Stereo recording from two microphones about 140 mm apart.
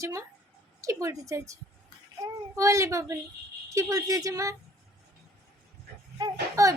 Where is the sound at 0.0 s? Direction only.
20° right (ahead or behind).